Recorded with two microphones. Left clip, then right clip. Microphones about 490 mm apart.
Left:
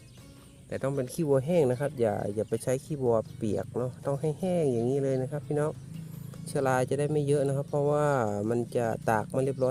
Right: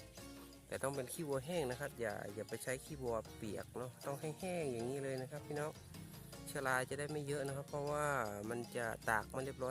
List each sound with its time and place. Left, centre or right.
0.7 s speech: right